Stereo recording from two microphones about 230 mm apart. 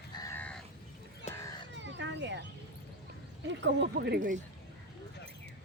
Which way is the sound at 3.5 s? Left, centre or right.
Right.